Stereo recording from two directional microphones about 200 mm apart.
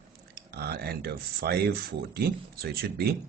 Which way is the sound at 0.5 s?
50° right (ahead or behind).